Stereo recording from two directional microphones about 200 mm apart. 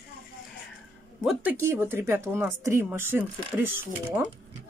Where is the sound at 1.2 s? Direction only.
5° right (ahead or behind).